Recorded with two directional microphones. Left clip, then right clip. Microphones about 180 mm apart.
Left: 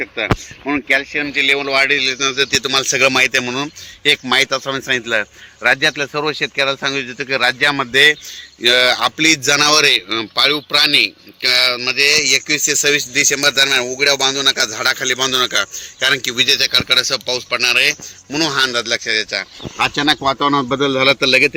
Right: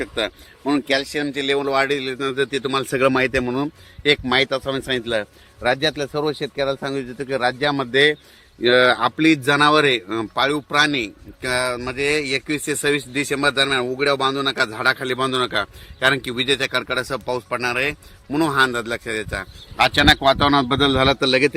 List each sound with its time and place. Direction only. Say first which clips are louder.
0.0 s speech: left 5 dB; 45° right (ahead or behind)
3.4 s speech: left 2 dB; 25° right (ahead or behind)
8.6 s a man's voice: left 2 dB; 45° right (ahead or behind)
20.1 s speech: even; 10° right (ahead or behind)